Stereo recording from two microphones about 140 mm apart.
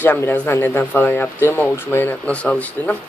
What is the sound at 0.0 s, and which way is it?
Speech, 15° left (ahead or behind).